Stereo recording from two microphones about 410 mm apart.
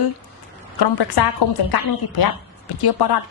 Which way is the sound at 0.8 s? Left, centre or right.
Left.